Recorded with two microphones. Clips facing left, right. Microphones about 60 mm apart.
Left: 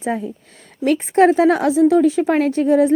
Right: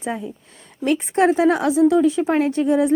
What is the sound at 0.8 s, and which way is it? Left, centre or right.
A woman's voice, left.